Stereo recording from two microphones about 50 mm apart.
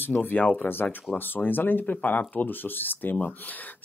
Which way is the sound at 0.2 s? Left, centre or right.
Left.